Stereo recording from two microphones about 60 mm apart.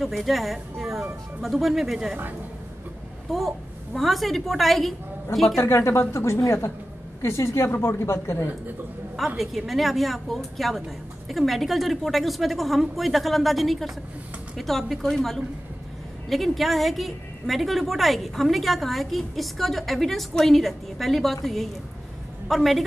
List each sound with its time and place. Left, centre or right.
0.0 s a woman's voice: centre
3.3 s a woman's voice: centre
5.6 s a woman's voice: left
9.4 s a woman's voice: centre
22.5 s a woman's voice: centre